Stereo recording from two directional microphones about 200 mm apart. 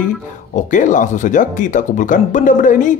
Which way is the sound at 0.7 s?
40° left (ahead or behind).